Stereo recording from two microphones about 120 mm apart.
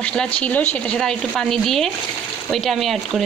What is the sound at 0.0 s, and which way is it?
Speech, 10° left (ahead or behind).